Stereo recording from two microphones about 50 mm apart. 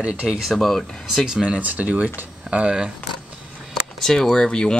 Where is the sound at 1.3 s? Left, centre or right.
Centre.